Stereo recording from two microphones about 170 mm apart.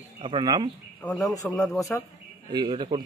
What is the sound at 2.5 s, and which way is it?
Speech, 30° right (ahead or behind).